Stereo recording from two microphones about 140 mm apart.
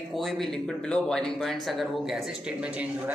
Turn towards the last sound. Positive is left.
turn(degrees=-10)  # may be behind; listen again after turning